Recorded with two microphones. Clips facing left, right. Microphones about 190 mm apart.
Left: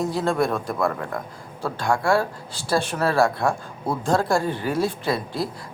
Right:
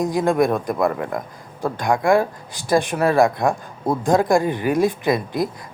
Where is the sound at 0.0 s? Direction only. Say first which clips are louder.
Right 4 dB; 15° right (ahead or behind).